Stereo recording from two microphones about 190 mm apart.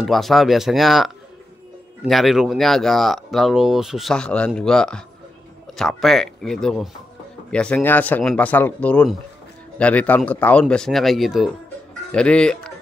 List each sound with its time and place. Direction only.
0.0 s speech: centre (ahead or behind)